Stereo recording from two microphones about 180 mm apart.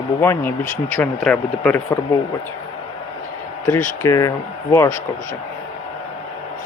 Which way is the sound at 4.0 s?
20° left (ahead or behind).